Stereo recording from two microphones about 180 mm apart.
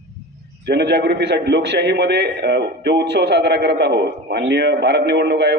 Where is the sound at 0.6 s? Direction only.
70° right (ahead or behind).